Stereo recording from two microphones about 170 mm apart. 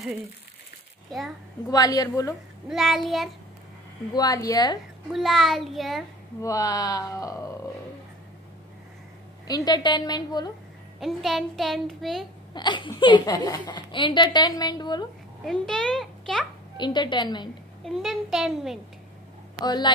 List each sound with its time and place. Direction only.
1.7 s a woman's voice: 20° left (ahead or behind)
2.7 s a woman's voice: centre (ahead or behind)
4.1 s a woman's voice: 20° left (ahead or behind)
5.1 s a woman's voice: centre (ahead or behind)
6.4 s a woman's voice: 20° left (ahead or behind)
9.5 s a woman's voice: 25° left (ahead or behind)
11.0 s a woman's voice: centre (ahead or behind)
12.5 s a woman's voice: 25° left (ahead or behind)
15.4 s a woman's voice: 5° left (ahead or behind)
16.7 s a woman's voice: 25° left (ahead or behind)
17.8 s a woman's voice: centre (ahead or behind)
19.6 s a woman's voice: 25° left (ahead or behind)